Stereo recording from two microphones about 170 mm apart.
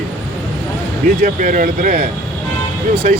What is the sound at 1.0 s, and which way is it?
Speech, 50° right (ahead or behind).